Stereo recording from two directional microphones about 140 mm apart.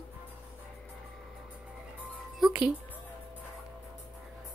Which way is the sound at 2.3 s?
5° right (ahead or behind).